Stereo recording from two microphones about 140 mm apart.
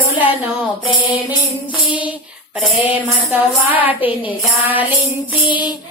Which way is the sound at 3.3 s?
10° right (ahead or behind).